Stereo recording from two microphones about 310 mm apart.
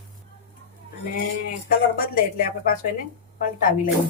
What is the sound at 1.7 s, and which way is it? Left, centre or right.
Speech, left.